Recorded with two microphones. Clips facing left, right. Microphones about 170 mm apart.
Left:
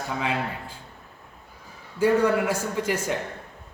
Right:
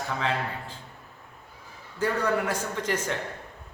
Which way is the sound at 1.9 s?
10° left (ahead or behind).